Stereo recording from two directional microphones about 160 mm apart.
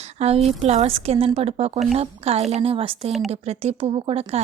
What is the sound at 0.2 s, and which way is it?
A woman's voice, 40° right (ahead or behind).